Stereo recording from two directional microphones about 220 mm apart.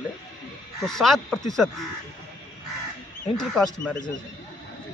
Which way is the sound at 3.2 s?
Centre (ahead or behind).